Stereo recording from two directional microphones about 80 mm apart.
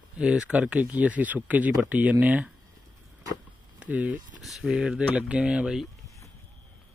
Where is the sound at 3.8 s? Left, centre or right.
Centre.